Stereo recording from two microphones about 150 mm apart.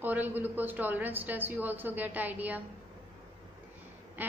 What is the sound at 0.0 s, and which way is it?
A woman's voice, 10° right (ahead or behind).